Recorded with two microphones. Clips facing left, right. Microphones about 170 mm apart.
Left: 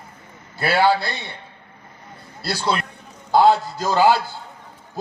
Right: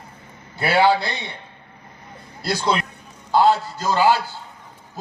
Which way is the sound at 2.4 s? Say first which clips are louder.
Right 1 dB; 15° right (ahead or behind).